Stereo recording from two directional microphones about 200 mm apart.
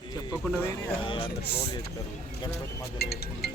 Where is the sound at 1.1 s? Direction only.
25° left (ahead or behind).